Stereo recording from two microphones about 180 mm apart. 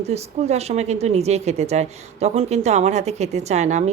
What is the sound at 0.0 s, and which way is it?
Speech, 35° right (ahead or behind).